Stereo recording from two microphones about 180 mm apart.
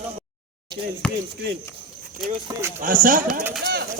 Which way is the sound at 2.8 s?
50° right (ahead or behind).